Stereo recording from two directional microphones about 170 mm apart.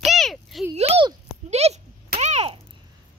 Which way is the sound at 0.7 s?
35° right (ahead or behind).